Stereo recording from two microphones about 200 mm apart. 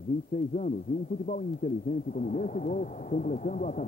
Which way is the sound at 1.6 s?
35° left (ahead or behind).